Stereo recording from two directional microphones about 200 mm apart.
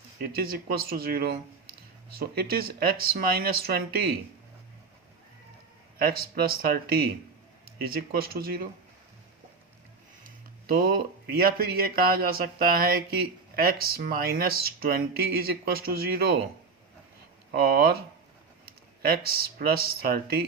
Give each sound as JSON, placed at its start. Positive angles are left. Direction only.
{"t": 0.2, "sound": "speech", "side_deg": -50}
{"t": 6.0, "sound": "speech", "side_deg": -50}
{"t": 10.2, "sound": "a sound", "side_deg": -45}
{"t": 11.3, "sound": "speech", "side_deg": -50}
{"t": 17.5, "sound": "speech", "side_deg": -50}